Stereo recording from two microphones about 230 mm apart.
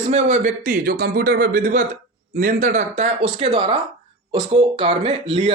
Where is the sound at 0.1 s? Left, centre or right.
Right.